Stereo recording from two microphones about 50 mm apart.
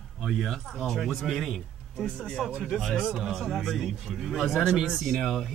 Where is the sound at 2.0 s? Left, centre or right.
Centre.